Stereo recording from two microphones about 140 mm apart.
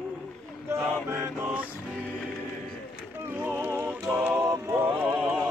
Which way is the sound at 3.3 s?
15° right (ahead or behind).